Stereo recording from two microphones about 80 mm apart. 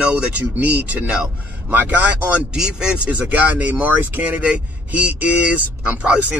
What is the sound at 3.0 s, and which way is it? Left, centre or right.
Speech, centre.